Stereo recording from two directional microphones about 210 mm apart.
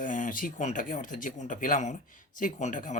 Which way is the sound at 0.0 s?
40° left (ahead or behind).